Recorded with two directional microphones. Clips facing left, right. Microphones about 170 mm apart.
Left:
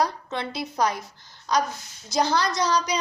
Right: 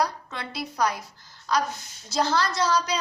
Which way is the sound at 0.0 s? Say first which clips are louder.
Left 2 dB; 20° left (ahead or behind).